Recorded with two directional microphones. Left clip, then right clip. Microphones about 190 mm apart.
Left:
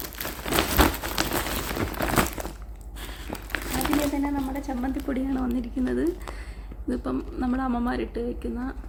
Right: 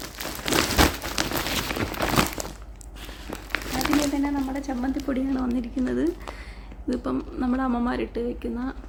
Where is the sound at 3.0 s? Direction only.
5° right (ahead or behind).